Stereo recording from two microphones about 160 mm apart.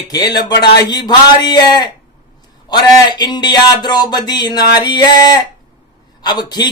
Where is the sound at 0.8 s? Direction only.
25° left (ahead or behind).